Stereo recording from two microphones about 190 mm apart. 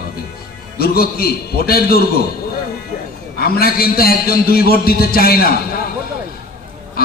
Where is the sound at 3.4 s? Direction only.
55° left (ahead or behind).